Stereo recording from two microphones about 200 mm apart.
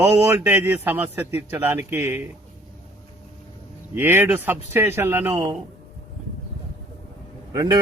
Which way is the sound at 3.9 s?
10° right (ahead or behind).